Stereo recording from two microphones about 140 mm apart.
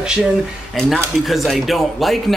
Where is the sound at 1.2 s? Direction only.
Centre (ahead or behind).